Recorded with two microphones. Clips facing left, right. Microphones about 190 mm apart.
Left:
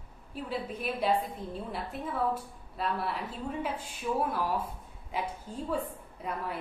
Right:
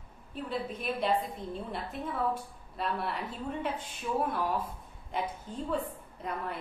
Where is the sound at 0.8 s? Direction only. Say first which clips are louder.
Left 1 dB; 5° left (ahead or behind).